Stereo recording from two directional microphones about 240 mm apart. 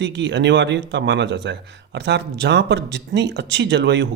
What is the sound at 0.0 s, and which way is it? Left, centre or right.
Speech, right.